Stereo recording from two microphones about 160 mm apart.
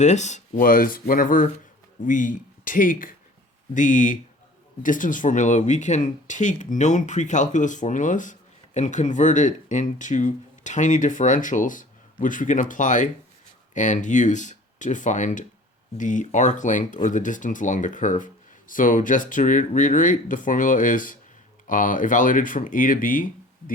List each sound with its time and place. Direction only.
0.0 s speech: 45° left (ahead or behind)